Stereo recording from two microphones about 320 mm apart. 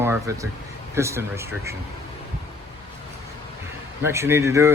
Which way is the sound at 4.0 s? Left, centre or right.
Centre.